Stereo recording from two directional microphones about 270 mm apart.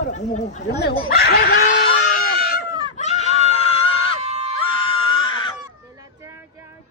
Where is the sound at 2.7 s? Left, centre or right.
Centre.